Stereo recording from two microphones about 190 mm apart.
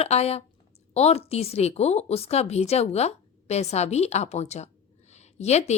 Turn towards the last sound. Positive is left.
turn(degrees=35)  # may be behind; listen again after turning